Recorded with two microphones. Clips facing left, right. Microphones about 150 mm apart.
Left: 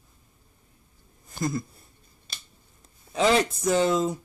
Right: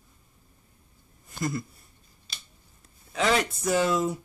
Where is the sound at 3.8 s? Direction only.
20° left (ahead or behind).